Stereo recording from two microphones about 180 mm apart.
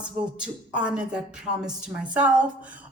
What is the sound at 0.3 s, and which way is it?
A man's voice, 5° right (ahead or behind).